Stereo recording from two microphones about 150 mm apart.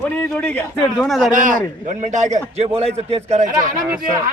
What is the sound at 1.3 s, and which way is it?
A man's voice, 60° right (ahead or behind).